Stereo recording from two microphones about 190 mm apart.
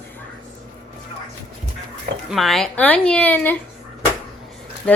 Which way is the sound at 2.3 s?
Centre (ahead or behind).